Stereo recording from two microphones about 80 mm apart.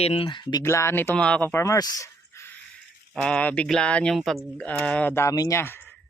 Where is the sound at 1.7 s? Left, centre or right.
Left.